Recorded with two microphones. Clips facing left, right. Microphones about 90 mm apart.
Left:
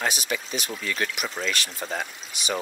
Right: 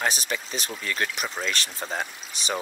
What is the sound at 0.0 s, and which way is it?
Speech, 35° right (ahead or behind).